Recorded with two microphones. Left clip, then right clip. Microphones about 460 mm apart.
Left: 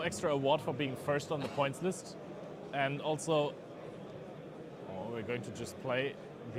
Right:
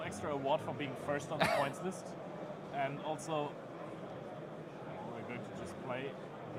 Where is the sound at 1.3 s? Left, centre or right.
Right.